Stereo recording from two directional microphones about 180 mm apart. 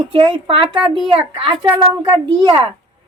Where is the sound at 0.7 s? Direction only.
Centre (ahead or behind).